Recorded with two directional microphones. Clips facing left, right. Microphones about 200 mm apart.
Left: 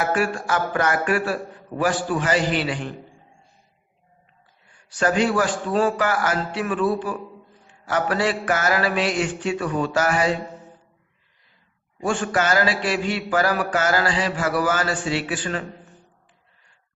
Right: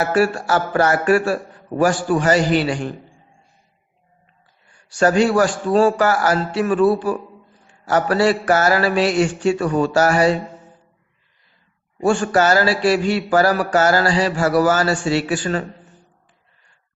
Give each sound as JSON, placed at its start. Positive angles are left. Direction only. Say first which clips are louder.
{"t": 0.1, "sound": "a man's voice", "louder": "right 5 dB", "side_deg": -40}
{"t": 4.9, "sound": "a man's voice", "louder": "right 5 dB", "side_deg": -40}
{"t": 12.0, "sound": "a man's voice", "louder": "right 6 dB", "side_deg": -40}